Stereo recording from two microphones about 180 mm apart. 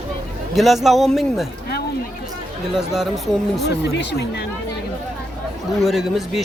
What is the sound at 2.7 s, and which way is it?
Speech, centre (ahead or behind).